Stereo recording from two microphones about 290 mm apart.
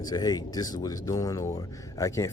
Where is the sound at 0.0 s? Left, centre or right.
Centre.